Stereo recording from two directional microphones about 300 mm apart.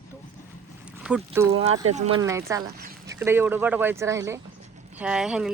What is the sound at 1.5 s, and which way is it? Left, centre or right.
Speech, right.